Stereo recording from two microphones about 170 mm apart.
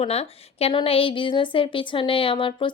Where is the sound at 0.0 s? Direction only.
35° left (ahead or behind).